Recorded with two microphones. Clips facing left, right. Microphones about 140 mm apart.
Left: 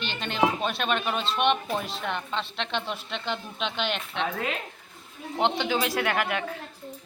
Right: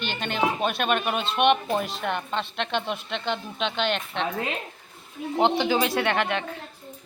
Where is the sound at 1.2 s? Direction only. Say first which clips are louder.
Right 4 dB; 60° right (ahead or behind).